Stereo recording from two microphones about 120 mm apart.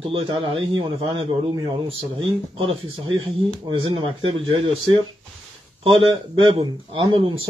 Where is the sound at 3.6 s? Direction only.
40° right (ahead or behind).